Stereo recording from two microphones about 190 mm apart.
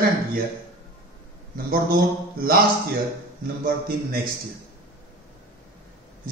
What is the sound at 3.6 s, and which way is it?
Speech, 55° right (ahead or behind).